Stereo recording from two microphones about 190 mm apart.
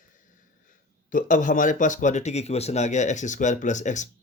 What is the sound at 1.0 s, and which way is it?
Speech, 45° left (ahead or behind).